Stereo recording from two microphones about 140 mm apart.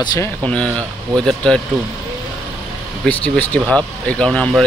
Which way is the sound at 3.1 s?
10° left (ahead or behind).